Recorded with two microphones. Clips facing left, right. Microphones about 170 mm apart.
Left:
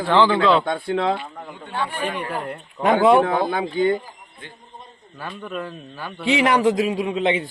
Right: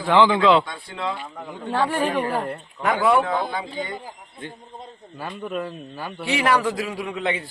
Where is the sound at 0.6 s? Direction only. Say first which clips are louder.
Left 8 dB; 60° left (ahead or behind).